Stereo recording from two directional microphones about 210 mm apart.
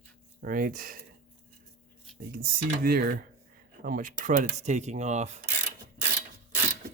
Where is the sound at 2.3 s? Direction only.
45° right (ahead or behind).